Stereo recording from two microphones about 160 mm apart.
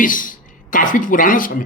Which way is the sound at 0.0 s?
55° left (ahead or behind).